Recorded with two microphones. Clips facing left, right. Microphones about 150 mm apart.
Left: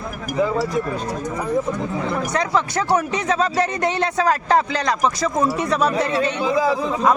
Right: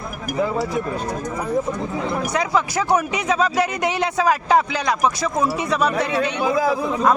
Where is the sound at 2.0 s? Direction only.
5° right (ahead or behind).